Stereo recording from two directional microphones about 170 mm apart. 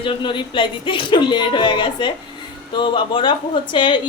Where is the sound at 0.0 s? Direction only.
30° left (ahead or behind).